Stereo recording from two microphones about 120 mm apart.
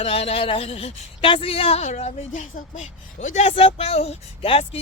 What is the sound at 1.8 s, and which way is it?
A woman's voice, 90° left.